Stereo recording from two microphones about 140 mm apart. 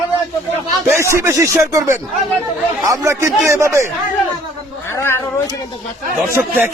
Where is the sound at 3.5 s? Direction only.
20° right (ahead or behind).